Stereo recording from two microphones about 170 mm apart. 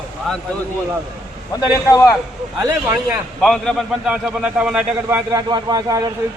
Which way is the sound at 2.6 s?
15° right (ahead or behind).